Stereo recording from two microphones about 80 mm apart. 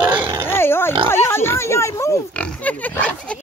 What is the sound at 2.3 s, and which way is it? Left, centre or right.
Speech, centre.